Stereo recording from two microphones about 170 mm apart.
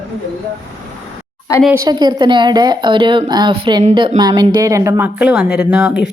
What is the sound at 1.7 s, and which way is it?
Speech, 20° right (ahead or behind).